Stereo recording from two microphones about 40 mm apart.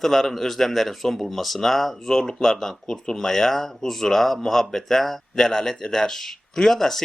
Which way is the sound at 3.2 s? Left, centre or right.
Centre.